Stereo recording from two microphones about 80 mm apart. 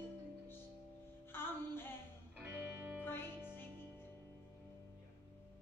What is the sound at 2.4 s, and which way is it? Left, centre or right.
Music, right.